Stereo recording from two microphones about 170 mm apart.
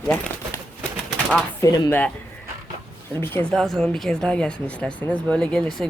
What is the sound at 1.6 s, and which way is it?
Speech, 25° left (ahead or behind).